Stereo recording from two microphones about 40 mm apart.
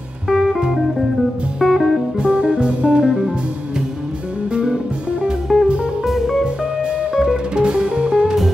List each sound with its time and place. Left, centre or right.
0.3 s music: centre
1.6 s music: centre
2.1 s music: right
4.5 s music: right
5.5 s music: centre
6.4 s music: right